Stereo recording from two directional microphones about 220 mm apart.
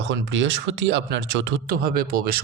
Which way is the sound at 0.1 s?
55° right (ahead or behind).